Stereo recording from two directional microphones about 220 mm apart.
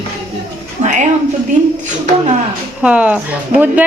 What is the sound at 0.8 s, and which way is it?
Speech, 35° right (ahead or behind).